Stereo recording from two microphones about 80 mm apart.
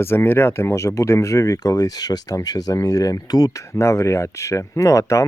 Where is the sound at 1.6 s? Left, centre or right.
Left.